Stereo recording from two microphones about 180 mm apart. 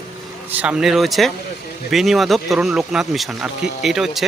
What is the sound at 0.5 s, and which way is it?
Speech, 5° right (ahead or behind).